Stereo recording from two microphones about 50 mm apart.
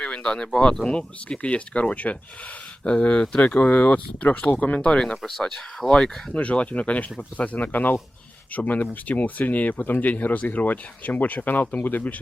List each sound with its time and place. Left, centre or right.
0.0 s speech: centre
6.3 s speech: left